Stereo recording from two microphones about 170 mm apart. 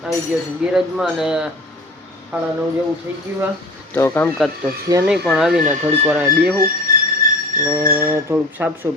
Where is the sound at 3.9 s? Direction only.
10° left (ahead or behind).